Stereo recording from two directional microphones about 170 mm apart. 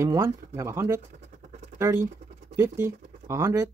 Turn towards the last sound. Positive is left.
turn(degrees=-20)  # may be behind; listen again after turning